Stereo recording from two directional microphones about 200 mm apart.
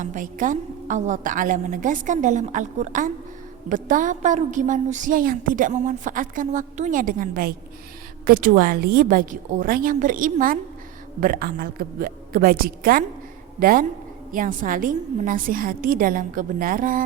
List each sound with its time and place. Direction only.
0.0 s a woman's voice: 40° right (ahead or behind)